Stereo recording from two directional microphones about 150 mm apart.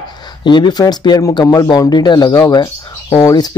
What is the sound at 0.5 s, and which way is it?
Speech, 30° left (ahead or behind).